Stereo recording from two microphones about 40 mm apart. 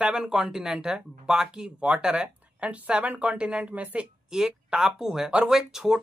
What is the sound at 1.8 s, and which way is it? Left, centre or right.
Speech, right.